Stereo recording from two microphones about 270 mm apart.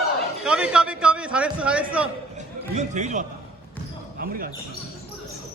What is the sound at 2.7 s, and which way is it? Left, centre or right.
Speech, right.